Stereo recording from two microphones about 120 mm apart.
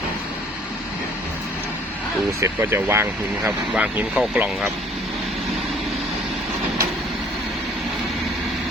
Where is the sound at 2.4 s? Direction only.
20° right (ahead or behind).